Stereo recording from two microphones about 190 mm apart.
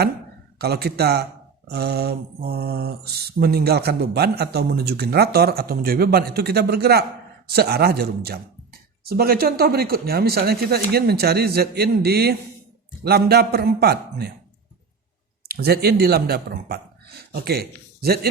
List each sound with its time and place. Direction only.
0.6 s speech: 55° right (ahead or behind)
15.4 s speech: 55° right (ahead or behind)